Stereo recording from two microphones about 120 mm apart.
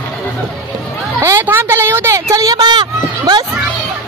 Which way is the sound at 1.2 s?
20° right (ahead or behind).